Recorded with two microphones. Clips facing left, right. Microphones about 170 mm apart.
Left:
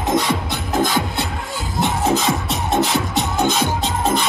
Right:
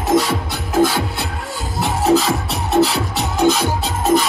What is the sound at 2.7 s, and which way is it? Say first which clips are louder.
Music: right 4 dB; 35° right (ahead or behind).